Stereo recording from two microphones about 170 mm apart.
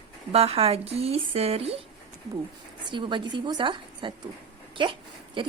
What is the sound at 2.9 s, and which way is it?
Speech, 30° right (ahead or behind).